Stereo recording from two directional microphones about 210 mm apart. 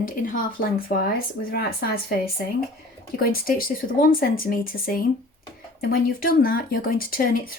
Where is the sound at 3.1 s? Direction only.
45° left (ahead or behind).